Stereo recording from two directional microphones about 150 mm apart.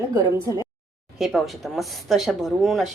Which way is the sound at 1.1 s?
Centre (ahead or behind).